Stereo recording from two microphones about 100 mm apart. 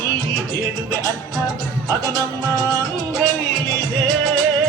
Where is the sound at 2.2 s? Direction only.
35° right (ahead or behind).